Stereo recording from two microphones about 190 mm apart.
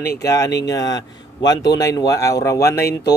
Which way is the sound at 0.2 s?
15° left (ahead or behind).